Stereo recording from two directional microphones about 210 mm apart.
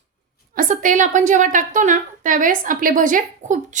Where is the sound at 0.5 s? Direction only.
40° right (ahead or behind).